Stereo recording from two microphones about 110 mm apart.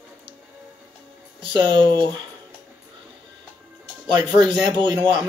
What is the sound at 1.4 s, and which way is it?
Speech, 45° right (ahead or behind).